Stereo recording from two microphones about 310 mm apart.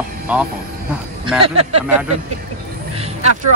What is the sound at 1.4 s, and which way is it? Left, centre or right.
Speech, centre.